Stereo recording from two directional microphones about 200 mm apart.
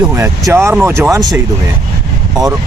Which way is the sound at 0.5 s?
10° right (ahead or behind).